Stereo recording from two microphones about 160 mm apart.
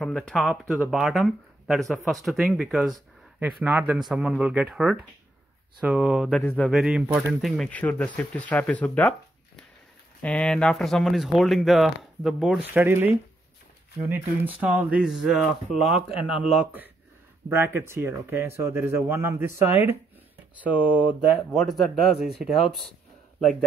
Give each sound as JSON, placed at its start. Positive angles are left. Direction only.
{"t": 0.0, "sound": "speech", "side_deg": 5}
{"t": 6.4, "sound": "speech", "side_deg": 10}
{"t": 6.7, "sound": "speech", "side_deg": -5}
{"t": 10.2, "sound": "speech", "side_deg": 5}